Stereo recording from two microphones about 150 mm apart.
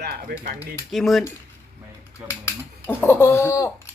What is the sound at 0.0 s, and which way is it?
Speech, 90° right.